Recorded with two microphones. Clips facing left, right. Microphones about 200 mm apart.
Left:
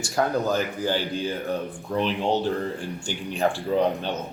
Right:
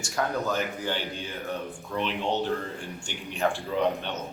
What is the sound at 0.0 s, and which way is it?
Speech, 35° left (ahead or behind).